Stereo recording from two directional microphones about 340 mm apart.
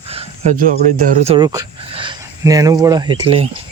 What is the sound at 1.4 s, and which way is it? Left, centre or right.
Speech, centre.